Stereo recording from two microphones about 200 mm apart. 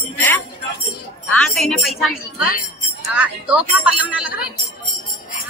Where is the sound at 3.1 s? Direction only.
5° right (ahead or behind).